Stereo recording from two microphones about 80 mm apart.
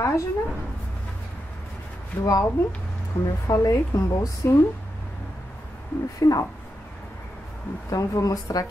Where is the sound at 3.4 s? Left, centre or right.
Left.